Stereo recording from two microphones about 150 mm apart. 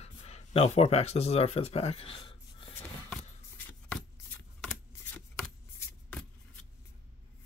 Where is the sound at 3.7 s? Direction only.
5° left (ahead or behind).